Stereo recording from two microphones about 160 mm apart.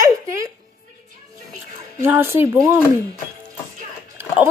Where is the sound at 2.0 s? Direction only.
15° right (ahead or behind).